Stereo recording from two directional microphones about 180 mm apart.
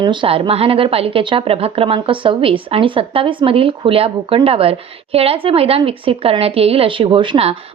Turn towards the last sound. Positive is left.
turn(degrees=-30)  # may be behind; listen again after turning